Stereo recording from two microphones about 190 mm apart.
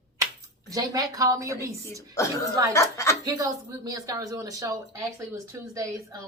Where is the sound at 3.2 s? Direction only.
20° right (ahead or behind).